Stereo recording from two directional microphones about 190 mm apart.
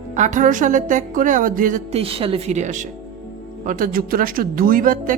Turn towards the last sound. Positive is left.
turn(degrees=-45)  # may be behind; listen again after turning